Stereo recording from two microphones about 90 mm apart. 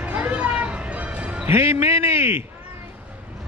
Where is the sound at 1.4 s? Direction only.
30° right (ahead or behind).